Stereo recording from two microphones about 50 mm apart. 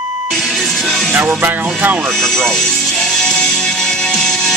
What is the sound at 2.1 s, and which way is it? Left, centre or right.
Speech, centre.